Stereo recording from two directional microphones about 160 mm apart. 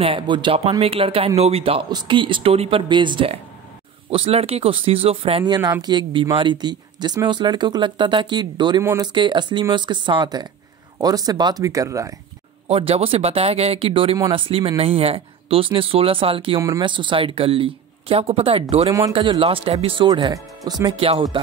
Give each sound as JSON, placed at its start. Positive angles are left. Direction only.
{"t": 0.0, "sound": "speech", "side_deg": -30}
{"t": 9.1, "sound": "speech", "side_deg": -30}
{"t": 12.6, "sound": "speech", "side_deg": -40}